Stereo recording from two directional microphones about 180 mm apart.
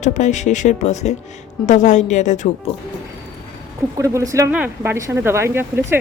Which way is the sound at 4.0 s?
15° right (ahead or behind).